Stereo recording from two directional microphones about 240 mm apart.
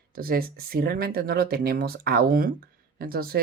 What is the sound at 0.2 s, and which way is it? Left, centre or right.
Speech, right.